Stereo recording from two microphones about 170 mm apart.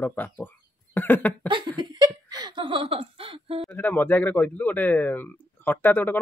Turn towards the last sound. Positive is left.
turn(degrees=10)  # may be behind; listen again after turning